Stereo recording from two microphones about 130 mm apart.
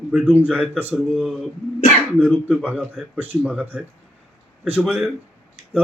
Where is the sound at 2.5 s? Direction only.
10° right (ahead or behind).